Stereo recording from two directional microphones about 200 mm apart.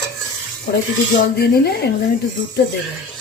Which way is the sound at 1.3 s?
50° left (ahead or behind).